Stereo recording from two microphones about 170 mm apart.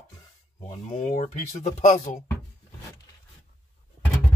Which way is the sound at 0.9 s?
45° left (ahead or behind).